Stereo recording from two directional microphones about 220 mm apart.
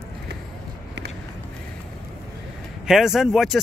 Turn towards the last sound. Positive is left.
turn(degrees=0)  # may be behind; listen again after turning